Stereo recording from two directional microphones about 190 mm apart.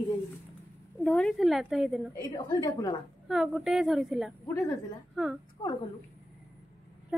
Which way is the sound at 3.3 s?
Centre (ahead or behind).